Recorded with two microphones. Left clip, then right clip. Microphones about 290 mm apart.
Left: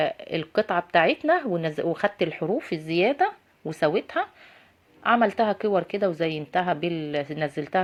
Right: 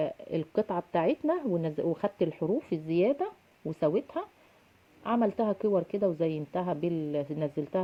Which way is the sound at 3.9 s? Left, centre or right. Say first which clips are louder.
Left 4 dB; left.